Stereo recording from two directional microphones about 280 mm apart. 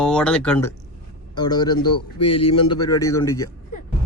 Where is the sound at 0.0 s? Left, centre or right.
Centre.